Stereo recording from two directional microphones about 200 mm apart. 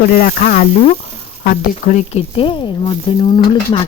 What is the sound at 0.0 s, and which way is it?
Speech, 45° left (ahead or behind).